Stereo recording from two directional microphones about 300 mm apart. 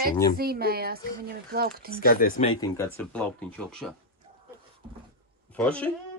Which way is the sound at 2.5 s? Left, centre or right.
Centre.